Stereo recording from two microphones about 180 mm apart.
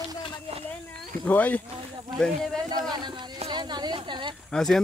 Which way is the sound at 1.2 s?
10° left (ahead or behind).